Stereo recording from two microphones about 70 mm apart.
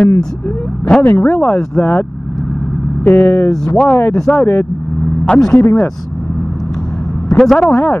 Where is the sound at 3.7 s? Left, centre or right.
Centre.